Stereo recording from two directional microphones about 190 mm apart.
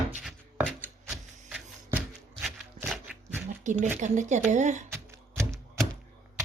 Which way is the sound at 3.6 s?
40° right (ahead or behind).